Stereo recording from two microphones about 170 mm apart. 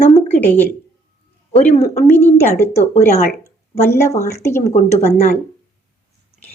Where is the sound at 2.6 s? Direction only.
15° left (ahead or behind).